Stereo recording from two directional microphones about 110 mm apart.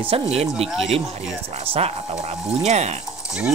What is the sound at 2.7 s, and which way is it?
Speech, 90° right.